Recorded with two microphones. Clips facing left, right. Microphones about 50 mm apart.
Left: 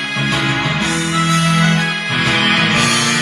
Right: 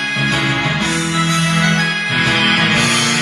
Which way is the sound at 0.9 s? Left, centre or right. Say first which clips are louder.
Even; left.